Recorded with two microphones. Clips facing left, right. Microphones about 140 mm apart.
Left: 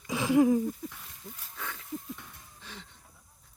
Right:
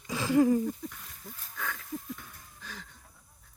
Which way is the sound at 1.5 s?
25° left (ahead or behind).